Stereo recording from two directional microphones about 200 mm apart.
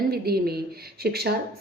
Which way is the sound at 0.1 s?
50° right (ahead or behind).